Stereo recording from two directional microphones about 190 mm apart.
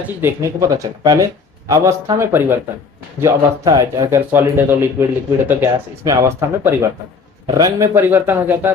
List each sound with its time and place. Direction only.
0.2 s speech: 15° right (ahead or behind)